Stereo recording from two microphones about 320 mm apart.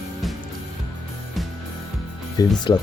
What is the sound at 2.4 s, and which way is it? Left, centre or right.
Speech, centre.